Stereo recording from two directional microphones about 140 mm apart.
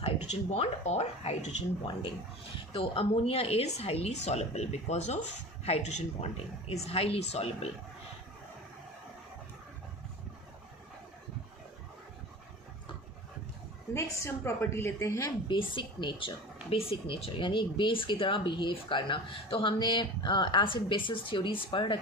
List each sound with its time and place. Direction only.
0.3 s speech: 50° left (ahead or behind)
1.8 s speech: 35° left (ahead or behind)
13.9 s a woman's voice: 20° left (ahead or behind)
15.4 s speech: 35° left (ahead or behind)